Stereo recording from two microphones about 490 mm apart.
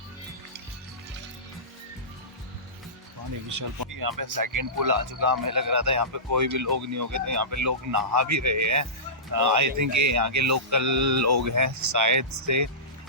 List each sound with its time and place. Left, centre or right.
3.5 s speech: right